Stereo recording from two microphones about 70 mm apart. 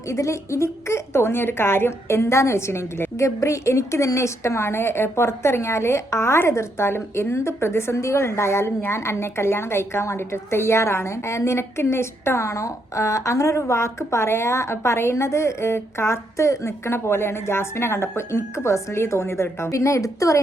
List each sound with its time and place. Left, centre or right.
0.1 s a woman's voice: left